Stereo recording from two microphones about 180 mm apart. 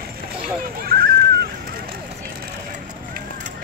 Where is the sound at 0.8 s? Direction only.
55° right (ahead or behind).